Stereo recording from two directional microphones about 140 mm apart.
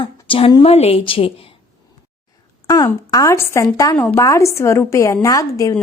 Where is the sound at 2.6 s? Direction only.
25° left (ahead or behind).